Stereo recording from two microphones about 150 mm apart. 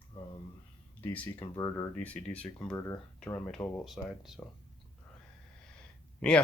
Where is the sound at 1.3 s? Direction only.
25° left (ahead or behind).